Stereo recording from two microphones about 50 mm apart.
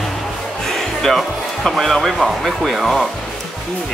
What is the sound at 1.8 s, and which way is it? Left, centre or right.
Speech, centre.